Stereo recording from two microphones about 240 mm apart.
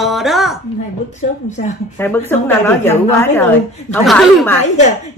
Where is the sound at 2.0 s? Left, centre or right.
Centre.